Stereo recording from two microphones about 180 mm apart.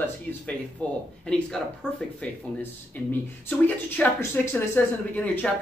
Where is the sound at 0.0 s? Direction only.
10° left (ahead or behind).